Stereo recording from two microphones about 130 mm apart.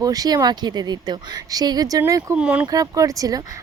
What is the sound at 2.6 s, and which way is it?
Speech, 30° right (ahead or behind).